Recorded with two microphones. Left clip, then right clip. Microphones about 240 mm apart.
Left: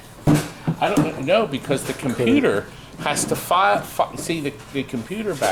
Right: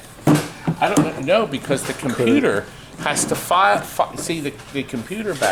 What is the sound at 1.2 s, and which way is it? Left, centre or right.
Speech, centre.